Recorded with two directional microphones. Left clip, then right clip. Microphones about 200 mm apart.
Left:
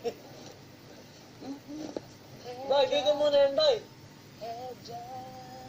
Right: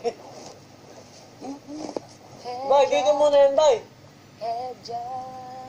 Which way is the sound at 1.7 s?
20° right (ahead or behind).